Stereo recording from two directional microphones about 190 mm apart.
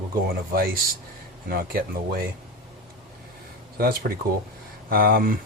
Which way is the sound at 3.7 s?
55° right (ahead or behind).